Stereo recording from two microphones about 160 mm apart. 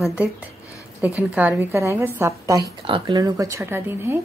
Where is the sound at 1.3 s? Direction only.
5° right (ahead or behind).